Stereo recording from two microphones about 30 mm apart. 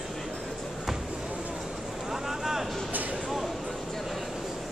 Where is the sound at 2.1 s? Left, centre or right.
Centre.